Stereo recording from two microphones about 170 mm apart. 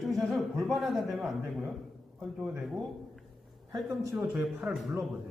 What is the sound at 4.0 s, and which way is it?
Speech, 15° right (ahead or behind).